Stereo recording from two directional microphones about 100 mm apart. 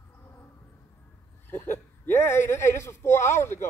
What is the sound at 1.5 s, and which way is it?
Speech, 25° left (ahead or behind).